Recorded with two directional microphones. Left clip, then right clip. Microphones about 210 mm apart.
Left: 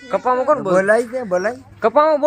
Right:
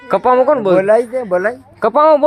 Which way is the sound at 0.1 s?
40° right (ahead or behind).